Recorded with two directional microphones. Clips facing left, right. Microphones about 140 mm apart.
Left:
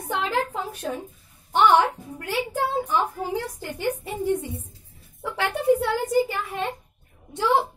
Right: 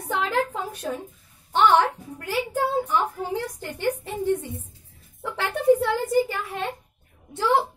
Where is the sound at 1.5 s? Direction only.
10° left (ahead or behind).